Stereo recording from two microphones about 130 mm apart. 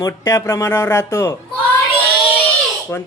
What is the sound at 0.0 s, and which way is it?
Speech, 25° left (ahead or behind).